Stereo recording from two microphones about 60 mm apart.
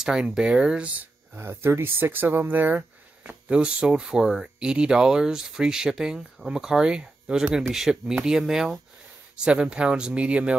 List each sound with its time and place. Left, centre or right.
0.0 s speech: centre
1.3 s speech: right
3.5 s speech: centre